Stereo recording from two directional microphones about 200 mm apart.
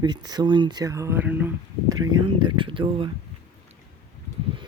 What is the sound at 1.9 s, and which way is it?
Speech, 90° right.